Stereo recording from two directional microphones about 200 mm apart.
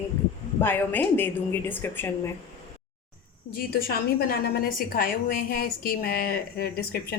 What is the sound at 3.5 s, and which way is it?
A woman's voice, 50° left (ahead or behind).